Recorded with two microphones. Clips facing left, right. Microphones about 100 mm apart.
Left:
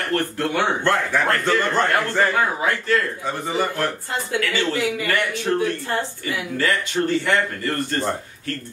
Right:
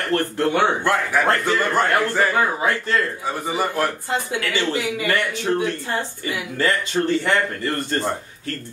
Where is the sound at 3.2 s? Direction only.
10° right (ahead or behind).